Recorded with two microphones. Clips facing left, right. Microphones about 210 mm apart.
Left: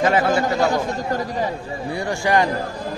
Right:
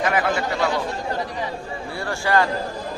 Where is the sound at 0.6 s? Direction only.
45° left (ahead or behind).